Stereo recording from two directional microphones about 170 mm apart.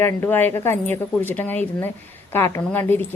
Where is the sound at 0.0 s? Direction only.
10° left (ahead or behind).